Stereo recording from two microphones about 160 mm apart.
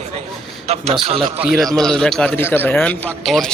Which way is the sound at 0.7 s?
40° right (ahead or behind).